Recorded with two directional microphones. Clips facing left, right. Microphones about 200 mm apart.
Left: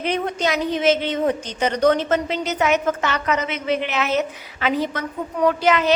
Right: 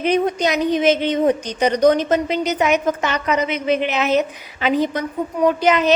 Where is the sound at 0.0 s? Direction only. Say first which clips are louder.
Right 5 dB; 15° right (ahead or behind).